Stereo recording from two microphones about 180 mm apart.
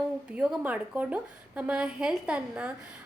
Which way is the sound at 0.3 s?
5° right (ahead or behind).